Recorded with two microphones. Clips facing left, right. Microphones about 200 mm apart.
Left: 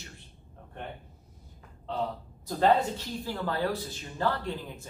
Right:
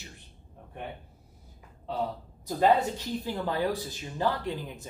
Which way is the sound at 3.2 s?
15° right (ahead or behind).